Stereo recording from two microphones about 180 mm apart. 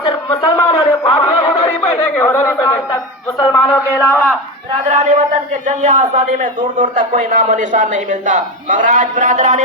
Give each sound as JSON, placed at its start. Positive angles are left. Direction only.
{"t": 0.3, "sound": "a sound", "side_deg": 30}
{"t": 2.1, "sound": "a man's voice", "side_deg": 15}
{"t": 4.9, "sound": "a man's voice", "side_deg": -40}